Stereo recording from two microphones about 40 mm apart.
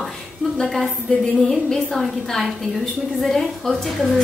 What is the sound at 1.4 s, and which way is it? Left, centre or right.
A woman's voice, centre.